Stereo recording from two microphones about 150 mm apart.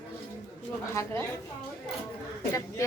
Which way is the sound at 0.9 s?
15° left (ahead or behind).